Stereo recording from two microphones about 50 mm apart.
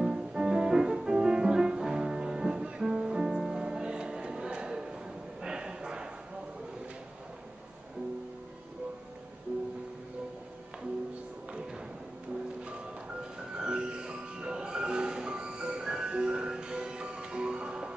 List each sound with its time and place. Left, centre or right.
0.0 s music: centre
5.4 s a sound: centre
13.2 s music: centre